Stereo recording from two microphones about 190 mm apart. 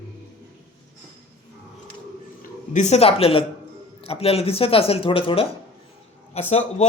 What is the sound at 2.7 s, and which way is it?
Speech, 35° left (ahead or behind).